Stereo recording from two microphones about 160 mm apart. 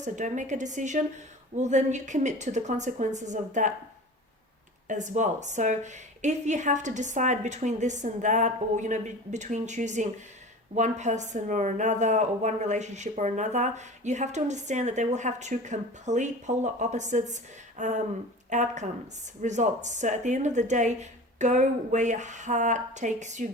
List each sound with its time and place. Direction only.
0.0 s speech: 50° right (ahead or behind)
4.9 s speech: 50° right (ahead or behind)